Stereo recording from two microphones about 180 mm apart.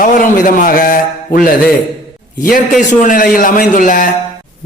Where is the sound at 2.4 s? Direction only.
50° left (ahead or behind).